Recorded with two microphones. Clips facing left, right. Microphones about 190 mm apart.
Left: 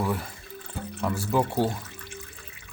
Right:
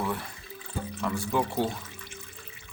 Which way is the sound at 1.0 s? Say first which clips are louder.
Left 3 dB; 5° left (ahead or behind).